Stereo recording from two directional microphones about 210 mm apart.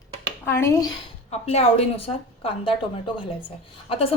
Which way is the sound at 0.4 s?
10° left (ahead or behind).